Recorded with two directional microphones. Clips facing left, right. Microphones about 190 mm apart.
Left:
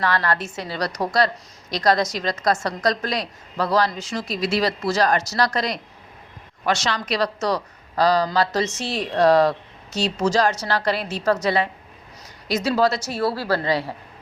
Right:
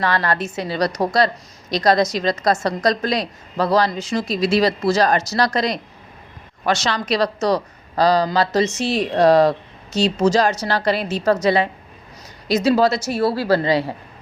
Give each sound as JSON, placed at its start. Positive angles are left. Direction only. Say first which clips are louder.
{"t": 0.0, "sound": "a woman's voice", "louder": "right 2 dB", "side_deg": -20}